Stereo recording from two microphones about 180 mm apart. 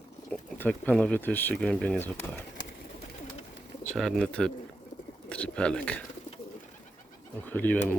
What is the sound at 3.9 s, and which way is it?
Speech, 5° left (ahead or behind).